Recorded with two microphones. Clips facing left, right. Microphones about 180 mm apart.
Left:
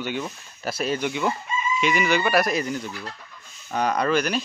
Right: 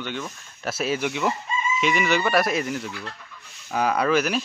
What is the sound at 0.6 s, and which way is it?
Speech, 5° right (ahead or behind).